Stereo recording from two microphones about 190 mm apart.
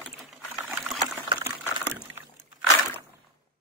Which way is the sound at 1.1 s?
15° right (ahead or behind).